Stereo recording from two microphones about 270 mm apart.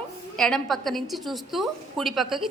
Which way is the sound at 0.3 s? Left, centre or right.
Centre.